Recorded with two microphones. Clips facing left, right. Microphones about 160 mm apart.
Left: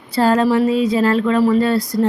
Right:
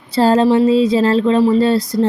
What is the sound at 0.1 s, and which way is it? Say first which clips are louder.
Speech: right 3 dB; 25° right (ahead or behind).